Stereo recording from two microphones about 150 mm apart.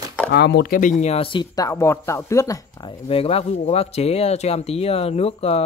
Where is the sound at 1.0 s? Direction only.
40° left (ahead or behind).